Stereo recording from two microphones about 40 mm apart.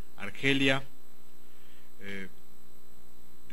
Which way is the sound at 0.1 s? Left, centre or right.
Centre.